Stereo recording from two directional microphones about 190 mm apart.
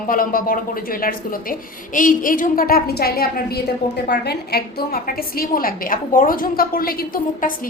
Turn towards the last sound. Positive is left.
turn(degrees=50)  # may be behind; listen again after turning